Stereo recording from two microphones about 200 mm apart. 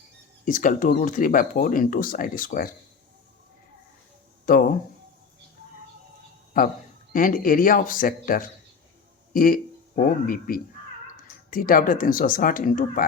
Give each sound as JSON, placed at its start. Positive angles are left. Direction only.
{"t": 0.4, "sound": "speech", "side_deg": 40}
{"t": 4.4, "sound": "speech", "side_deg": 45}
{"t": 6.5, "sound": "speech", "side_deg": 45}